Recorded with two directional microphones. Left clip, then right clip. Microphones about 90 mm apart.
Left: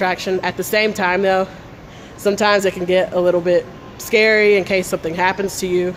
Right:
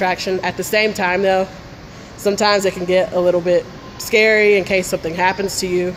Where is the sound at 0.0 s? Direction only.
20° left (ahead or behind).